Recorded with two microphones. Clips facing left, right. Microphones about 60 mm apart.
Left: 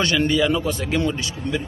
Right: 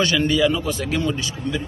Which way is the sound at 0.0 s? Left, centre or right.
Left.